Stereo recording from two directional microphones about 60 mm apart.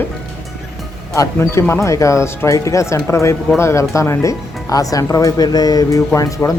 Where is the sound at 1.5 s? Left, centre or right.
Left.